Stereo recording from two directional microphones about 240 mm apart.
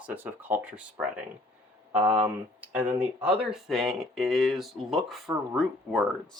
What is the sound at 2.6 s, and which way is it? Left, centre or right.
Speech, centre.